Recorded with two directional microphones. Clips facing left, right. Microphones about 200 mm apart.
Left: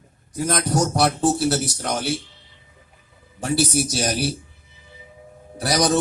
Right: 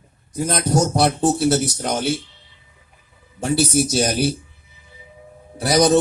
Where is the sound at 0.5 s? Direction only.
25° right (ahead or behind).